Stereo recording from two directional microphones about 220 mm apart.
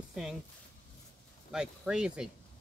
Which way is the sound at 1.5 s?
5° right (ahead or behind).